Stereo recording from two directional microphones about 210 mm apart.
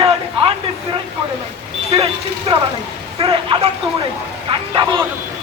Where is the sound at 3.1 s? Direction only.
25° right (ahead or behind).